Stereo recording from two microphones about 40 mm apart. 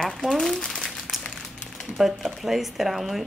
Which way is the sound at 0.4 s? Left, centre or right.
Centre.